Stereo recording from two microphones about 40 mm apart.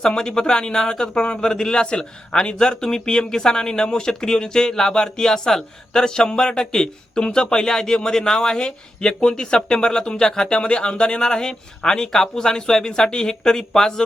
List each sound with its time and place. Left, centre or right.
0.0 s speech: centre